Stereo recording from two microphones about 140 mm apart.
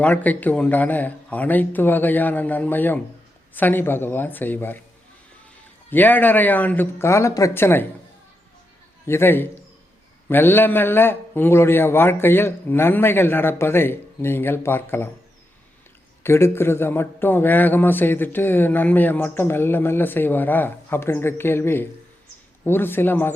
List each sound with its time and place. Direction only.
0.0 s a man's voice: 10° left (ahead or behind)
5.9 s a man's voice: 15° left (ahead or behind)
9.0 s a man's voice: 15° left (ahead or behind)
16.2 s a man's voice: 15° left (ahead or behind)